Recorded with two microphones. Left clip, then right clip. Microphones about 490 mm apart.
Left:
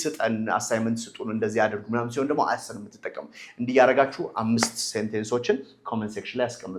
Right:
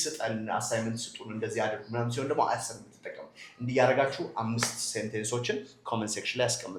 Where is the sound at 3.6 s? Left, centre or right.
Left.